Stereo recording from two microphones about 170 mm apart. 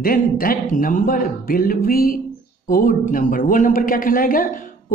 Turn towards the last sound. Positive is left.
turn(degrees=55)  # may be behind; listen again after turning